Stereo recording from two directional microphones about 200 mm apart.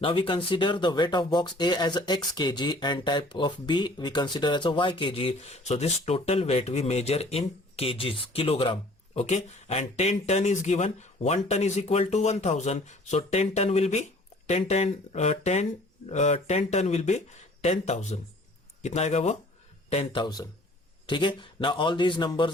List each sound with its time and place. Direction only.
0.0 s a man's voice: 25° left (ahead or behind)